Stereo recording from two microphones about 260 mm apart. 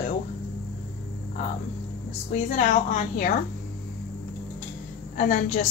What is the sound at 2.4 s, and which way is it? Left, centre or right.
Speech, left.